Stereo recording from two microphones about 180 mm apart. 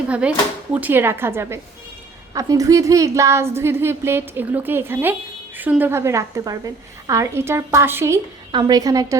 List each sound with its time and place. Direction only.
0.1 s a woman's voice: 5° right (ahead or behind)